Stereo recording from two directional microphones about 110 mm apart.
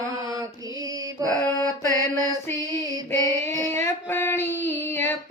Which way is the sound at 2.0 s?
35° right (ahead or behind).